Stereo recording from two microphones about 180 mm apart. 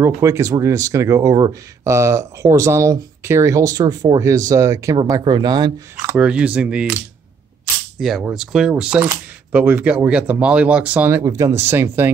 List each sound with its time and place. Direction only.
0.0 s speech: 15° right (ahead or behind)
6.1 s speech: 5° right (ahead or behind)
8.0 s speech: 5° right (ahead or behind)